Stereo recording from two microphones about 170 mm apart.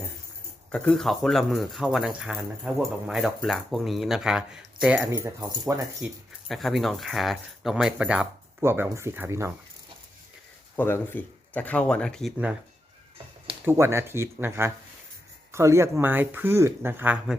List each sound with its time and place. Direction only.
0.7 s speech: 5° left (ahead or behind); by 5.8 s 20° right (ahead or behind)
6.0 s speech: 5° right (ahead or behind)
10.8 s speech: 10° left (ahead or behind)
13.7 s speech: 15° right (ahead or behind)